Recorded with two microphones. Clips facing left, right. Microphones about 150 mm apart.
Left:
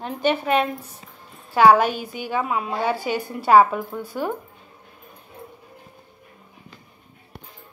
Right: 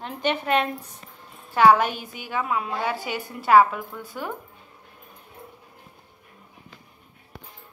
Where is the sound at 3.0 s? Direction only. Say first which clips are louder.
Left 6 dB; 40° left (ahead or behind).